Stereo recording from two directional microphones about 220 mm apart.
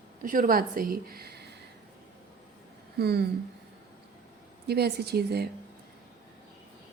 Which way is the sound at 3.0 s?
45° right (ahead or behind).